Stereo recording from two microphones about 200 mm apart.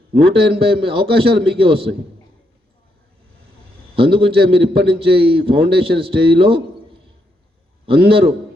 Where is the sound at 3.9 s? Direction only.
25° right (ahead or behind).